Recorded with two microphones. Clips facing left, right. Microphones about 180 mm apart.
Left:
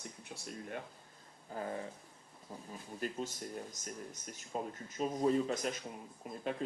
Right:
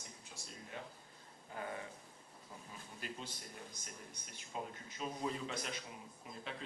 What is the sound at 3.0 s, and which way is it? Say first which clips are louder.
Speech: left 9 dB; 45° left (ahead or behind).